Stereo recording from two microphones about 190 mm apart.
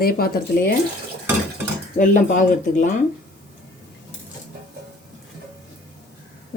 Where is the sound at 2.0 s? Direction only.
40° left (ahead or behind).